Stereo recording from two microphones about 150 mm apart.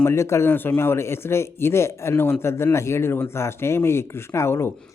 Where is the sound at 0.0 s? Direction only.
20° left (ahead or behind).